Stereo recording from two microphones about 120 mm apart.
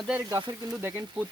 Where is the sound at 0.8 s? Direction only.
20° right (ahead or behind).